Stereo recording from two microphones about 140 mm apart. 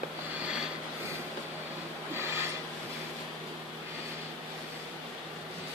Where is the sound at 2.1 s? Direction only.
15° right (ahead or behind).